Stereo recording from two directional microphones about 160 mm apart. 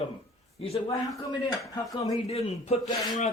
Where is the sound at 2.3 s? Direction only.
40° left (ahead or behind).